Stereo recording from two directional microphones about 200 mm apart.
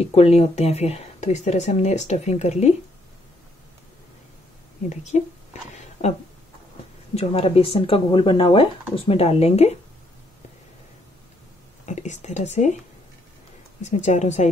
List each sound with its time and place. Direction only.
0.0 s speech: 30° left (ahead or behind)
4.8 s a woman's voice: 35° left (ahead or behind)
7.2 s speech: 30° left (ahead or behind)
11.8 s speech: 35° left (ahead or behind)
13.7 s speech: 35° left (ahead or behind)